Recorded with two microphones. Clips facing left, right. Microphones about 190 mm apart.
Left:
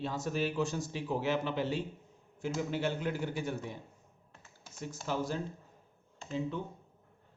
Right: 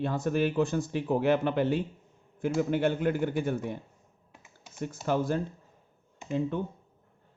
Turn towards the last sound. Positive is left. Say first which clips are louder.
# right 6 dB
turn(degrees=-55)  # may be behind; listen again after turning